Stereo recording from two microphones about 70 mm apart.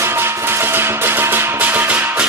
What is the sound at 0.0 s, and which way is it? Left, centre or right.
Music, right.